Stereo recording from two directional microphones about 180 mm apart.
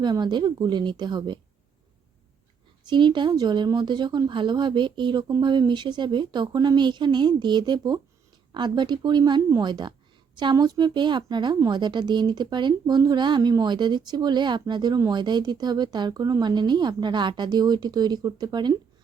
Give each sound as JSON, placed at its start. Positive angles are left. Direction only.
{"t": 0.0, "sound": "speech", "side_deg": -25}
{"t": 2.8, "sound": "speech", "side_deg": -25}